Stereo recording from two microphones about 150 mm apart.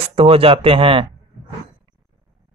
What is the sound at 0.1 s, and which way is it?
Speech, 40° right (ahead or behind).